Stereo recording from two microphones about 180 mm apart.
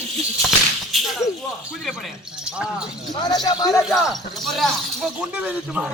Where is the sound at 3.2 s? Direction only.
25° left (ahead or behind).